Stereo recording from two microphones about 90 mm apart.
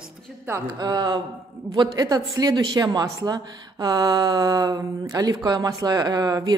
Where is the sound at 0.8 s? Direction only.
50° right (ahead or behind).